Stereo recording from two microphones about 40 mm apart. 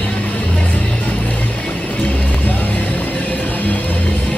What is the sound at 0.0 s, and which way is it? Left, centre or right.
Music, left.